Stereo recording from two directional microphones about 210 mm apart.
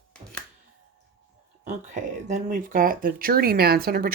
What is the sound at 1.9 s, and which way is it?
Speech, 35° right (ahead or behind).